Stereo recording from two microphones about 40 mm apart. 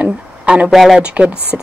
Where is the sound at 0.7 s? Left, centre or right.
Centre.